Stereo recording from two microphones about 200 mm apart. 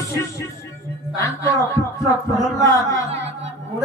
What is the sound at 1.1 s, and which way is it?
Speech, 15° left (ahead or behind).